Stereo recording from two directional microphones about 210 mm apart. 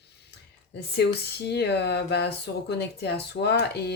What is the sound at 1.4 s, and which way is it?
Speech, 50° left (ahead or behind).